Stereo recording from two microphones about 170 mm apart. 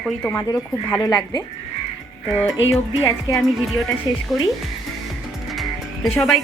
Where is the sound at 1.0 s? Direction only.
25° left (ahead or behind).